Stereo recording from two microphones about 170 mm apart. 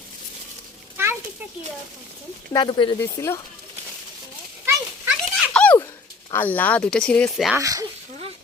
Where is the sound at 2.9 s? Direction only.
15° left (ahead or behind).